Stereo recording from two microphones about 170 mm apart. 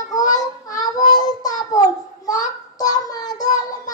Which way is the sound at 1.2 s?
20° left (ahead or behind).